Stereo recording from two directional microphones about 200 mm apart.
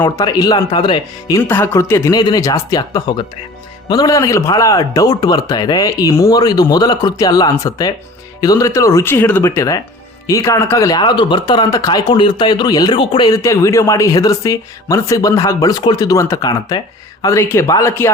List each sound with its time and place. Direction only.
0.0 s speech: 20° left (ahead or behind)
1.4 s speech: 10° left (ahead or behind)